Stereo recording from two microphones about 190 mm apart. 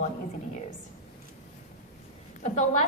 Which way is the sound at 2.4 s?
35° left (ahead or behind).